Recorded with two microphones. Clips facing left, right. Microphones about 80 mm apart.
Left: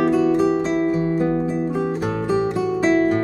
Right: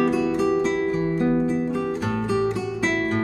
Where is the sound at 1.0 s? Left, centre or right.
Centre.